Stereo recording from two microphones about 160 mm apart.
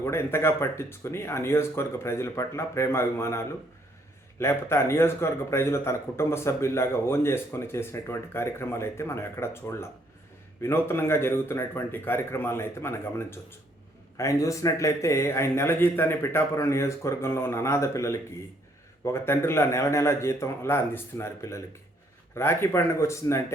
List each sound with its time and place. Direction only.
0.0 s a man's voice: 15° left (ahead or behind)